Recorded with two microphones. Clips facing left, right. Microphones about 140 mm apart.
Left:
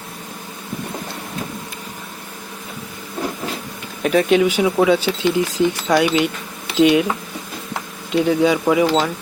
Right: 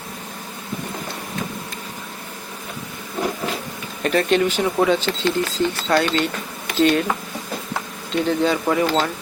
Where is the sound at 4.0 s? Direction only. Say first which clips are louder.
Left 3 dB; 5° left (ahead or behind).